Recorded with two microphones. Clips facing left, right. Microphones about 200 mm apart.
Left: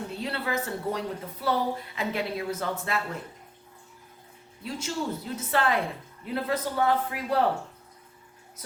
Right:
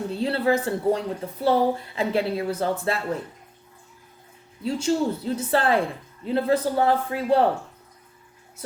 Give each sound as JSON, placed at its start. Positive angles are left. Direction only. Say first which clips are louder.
{"t": 0.1, "sound": "a woman's voice", "louder": "right 11 dB", "side_deg": -30}
{"t": 4.6, "sound": "a woman's voice", "louder": "right 9 dB", "side_deg": -30}